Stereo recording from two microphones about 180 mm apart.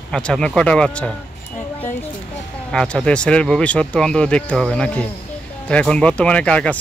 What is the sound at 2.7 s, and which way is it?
Speech, 5° left (ahead or behind).